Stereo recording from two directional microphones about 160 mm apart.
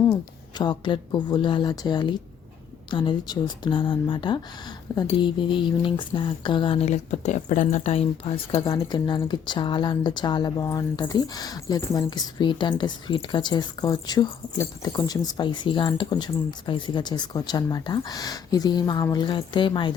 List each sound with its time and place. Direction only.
0.6 s speech: 30° left (ahead or behind)